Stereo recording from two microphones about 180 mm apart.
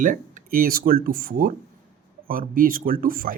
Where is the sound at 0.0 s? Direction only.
45° right (ahead or behind).